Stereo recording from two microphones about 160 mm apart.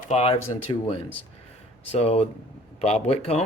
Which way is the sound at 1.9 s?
40° left (ahead or behind).